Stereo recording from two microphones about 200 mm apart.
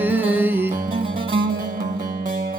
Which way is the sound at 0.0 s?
10° right (ahead or behind).